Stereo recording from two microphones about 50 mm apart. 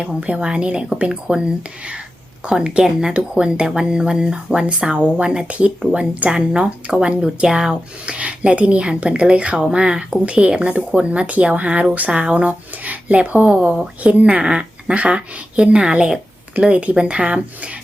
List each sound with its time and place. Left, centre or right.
0.2 s speech: right
4.8 s speech: right; by 7.8 s centre
8.0 s speech: right